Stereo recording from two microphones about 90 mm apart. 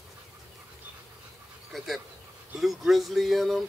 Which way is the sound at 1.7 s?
Centre (ahead or behind).